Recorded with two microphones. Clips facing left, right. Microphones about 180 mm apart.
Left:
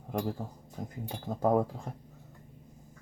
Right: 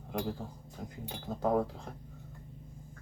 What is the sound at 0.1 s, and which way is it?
A man's voice, 45° left (ahead or behind).